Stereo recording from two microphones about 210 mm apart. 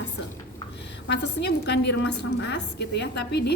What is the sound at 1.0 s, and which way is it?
A woman's voice, 55° left (ahead or behind).